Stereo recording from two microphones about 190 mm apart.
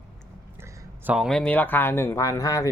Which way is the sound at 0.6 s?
10° right (ahead or behind).